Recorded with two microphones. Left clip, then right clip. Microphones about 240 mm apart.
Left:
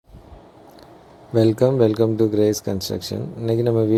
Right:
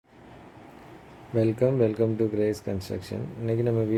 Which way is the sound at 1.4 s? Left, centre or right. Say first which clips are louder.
Left 7 dB; left.